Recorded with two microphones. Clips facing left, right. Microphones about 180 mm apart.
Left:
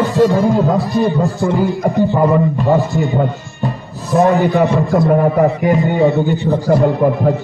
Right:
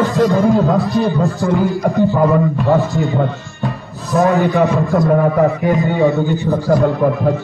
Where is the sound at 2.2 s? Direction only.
Centre (ahead or behind).